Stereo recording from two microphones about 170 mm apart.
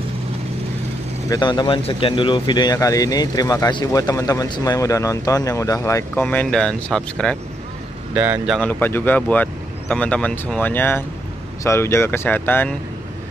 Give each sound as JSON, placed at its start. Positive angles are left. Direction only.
{"t": 1.3, "sound": "speech", "side_deg": 25}
{"t": 6.2, "sound": "speech", "side_deg": 5}
{"t": 8.1, "sound": "speech", "side_deg": -10}
{"t": 8.5, "sound": "speech", "side_deg": 10}